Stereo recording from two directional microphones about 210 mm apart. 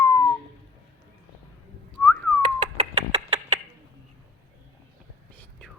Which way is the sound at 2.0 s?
5° left (ahead or behind).